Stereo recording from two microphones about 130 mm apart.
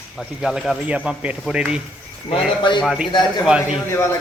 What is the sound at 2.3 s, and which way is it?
Speech, 35° left (ahead or behind).